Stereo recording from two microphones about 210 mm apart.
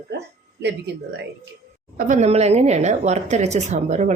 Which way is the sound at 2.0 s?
35° right (ahead or behind).